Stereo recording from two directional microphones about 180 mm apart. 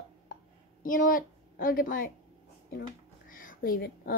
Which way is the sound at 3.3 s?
50° left (ahead or behind).